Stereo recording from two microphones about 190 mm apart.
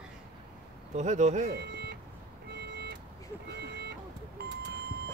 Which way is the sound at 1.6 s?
60° right (ahead or behind).